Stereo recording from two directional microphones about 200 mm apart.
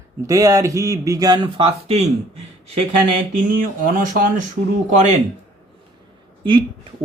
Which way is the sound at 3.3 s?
40° right (ahead or behind).